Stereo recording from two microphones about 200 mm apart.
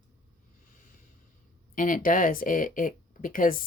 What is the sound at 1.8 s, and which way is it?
Speech, 45° left (ahead or behind).